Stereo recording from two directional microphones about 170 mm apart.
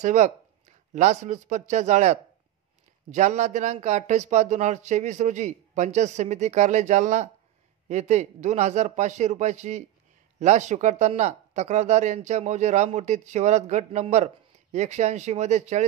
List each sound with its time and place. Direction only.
0.0 s speech: 45° right (ahead or behind)